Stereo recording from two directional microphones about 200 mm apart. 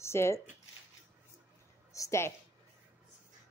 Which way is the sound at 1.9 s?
15° left (ahead or behind).